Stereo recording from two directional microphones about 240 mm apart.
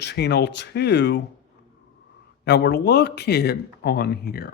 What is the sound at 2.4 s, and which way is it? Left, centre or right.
Speech, left.